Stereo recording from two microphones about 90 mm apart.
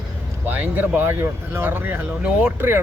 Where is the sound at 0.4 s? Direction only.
20° right (ahead or behind).